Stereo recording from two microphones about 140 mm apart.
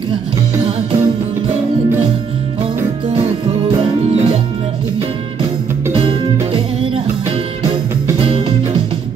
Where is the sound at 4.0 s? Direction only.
50° right (ahead or behind).